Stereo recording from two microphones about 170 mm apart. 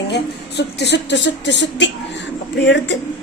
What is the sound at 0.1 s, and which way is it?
Speech, 80° left.